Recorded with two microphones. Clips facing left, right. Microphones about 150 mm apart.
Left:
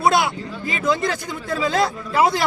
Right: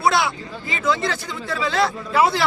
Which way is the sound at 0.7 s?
45° left (ahead or behind).